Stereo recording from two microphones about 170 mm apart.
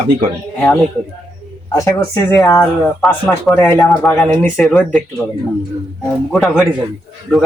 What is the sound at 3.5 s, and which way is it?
Speech, 15° left (ahead or behind).